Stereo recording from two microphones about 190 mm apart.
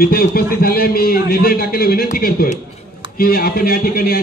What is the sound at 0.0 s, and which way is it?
A man's voice, 50° left (ahead or behind).